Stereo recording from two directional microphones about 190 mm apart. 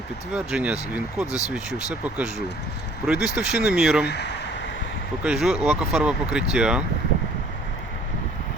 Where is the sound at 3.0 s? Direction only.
5° right (ahead or behind).